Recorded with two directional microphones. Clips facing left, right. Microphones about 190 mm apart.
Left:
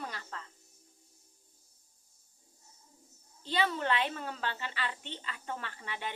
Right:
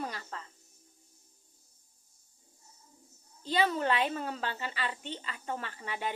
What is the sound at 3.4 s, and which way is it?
A woman's voice, 40° right (ahead or behind).